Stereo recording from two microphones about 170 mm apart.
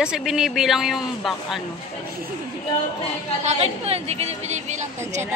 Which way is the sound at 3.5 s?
35° right (ahead or behind).